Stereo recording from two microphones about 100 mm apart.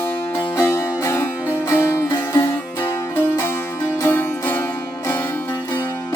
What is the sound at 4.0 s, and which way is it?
Music, 20° left (ahead or behind).